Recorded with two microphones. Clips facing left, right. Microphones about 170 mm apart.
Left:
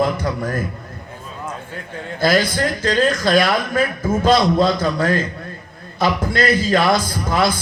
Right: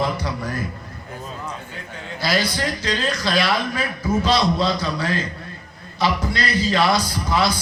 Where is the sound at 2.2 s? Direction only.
50° left (ahead or behind).